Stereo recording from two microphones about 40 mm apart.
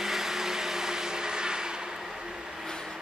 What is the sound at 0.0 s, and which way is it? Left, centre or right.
Vehicle, centre.